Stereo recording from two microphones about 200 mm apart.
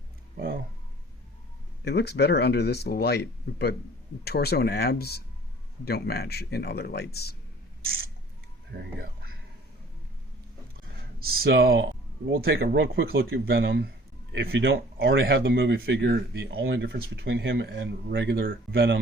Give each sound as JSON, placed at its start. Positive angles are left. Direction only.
{"t": 0.3, "sound": "a sound", "side_deg": -50}
{"t": 1.8, "sound": "speech", "side_deg": 55}
{"t": 11.2, "sound": "speech", "side_deg": -50}
{"t": 14.3, "sound": "speech", "side_deg": -65}
{"t": 15.2, "sound": "speech", "side_deg": -50}